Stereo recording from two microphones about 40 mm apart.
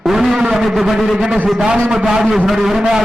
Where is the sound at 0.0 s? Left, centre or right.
Centre.